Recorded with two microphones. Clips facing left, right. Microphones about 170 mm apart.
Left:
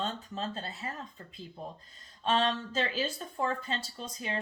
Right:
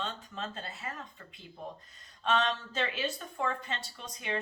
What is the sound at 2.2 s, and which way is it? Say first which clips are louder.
A woman's voice: left 1 dB; 35° left (ahead or behind).